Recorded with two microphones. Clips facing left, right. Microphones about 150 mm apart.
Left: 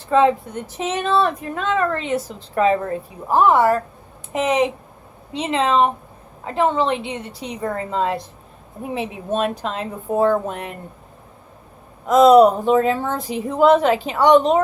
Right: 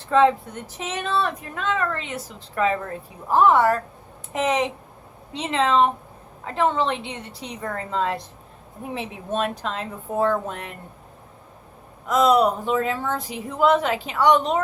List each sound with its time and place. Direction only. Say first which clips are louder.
0.1 s a woman's voice: left 2 dB; 10° left (ahead or behind)
0.8 s a woman's voice: left 6 dB; 25° left (ahead or behind)
12.0 s a woman's voice: left 7 dB; 30° left (ahead or behind)